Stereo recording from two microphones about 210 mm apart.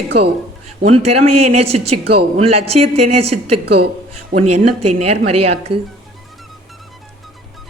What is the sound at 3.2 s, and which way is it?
Speech, 90° right.